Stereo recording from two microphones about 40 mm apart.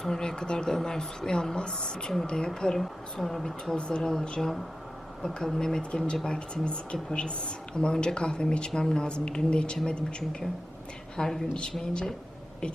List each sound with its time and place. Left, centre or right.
0.0 s speech: centre
2.8 s speech: centre
3.8 s speech: left
4.1 s speech: centre
5.9 s speech: left
11.2 s speech: centre